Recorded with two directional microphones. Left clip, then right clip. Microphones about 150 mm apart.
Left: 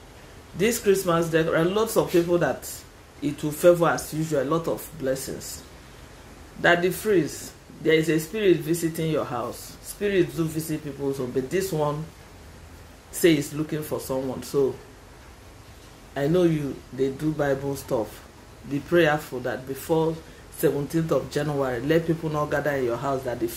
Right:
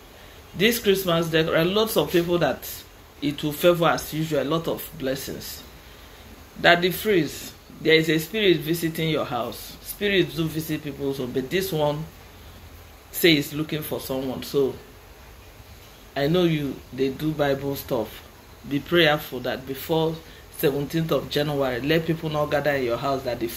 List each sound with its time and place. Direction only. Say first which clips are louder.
0.6 s a man's voice: right 1 dB; 20° left (ahead or behind)
6.6 s a man's voice: right 2 dB; 20° left (ahead or behind)
13.7 s a man's voice: even; 25° left (ahead or behind)
16.1 s a man's voice: even; 20° left (ahead or behind)